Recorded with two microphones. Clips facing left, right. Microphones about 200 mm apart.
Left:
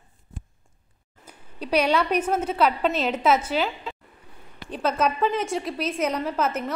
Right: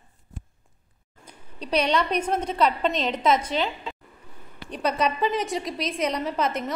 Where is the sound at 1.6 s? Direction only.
10° left (ahead or behind).